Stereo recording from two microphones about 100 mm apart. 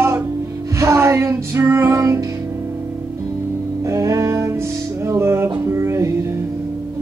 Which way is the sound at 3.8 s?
30° right (ahead or behind).